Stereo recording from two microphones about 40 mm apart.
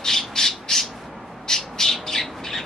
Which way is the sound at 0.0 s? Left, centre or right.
Centre.